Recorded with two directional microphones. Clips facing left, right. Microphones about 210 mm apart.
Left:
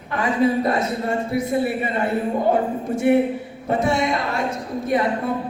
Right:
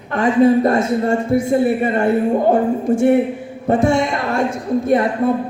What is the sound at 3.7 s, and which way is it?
Speech, 50° right (ahead or behind).